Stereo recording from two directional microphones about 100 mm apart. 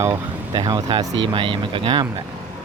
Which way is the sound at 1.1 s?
55° right (ahead or behind).